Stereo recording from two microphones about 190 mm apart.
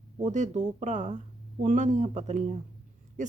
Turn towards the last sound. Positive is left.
turn(degrees=-40)  # may be behind; listen again after turning